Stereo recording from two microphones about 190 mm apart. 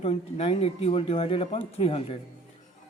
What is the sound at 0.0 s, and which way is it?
A man's voice, 30° left (ahead or behind).